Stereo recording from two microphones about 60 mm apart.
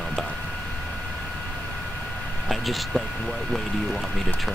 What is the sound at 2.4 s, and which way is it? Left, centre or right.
Speech, centre.